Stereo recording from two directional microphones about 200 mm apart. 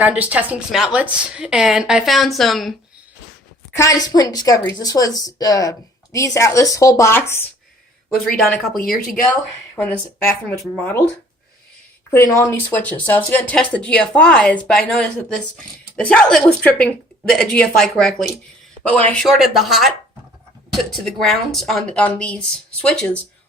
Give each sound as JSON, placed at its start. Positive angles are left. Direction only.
{"t": 0.0, "sound": "speech", "side_deg": -5}
{"t": 3.8, "sound": "speech", "side_deg": 15}
{"t": 8.1, "sound": "speech", "side_deg": 0}
{"t": 12.1, "sound": "speech", "side_deg": 15}